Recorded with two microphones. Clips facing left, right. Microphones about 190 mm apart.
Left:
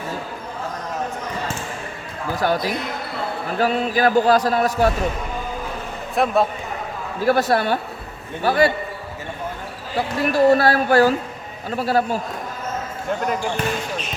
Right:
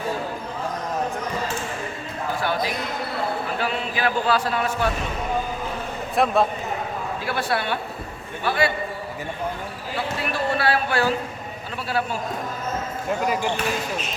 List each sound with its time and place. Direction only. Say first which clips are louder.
2.3 s a man's voice: left 4 dB; 40° left (ahead or behind)
6.1 s a man's voice: left 1 dB; centre (ahead or behind)
7.3 s a man's voice: left 8 dB; 40° left (ahead or behind)
10.3 s a man's voice: left 8 dB; 40° left (ahead or behind)
13.1 s a man's voice: left 1 dB; 5° right (ahead or behind)